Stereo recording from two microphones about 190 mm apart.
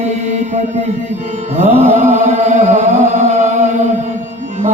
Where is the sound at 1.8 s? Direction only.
35° right (ahead or behind).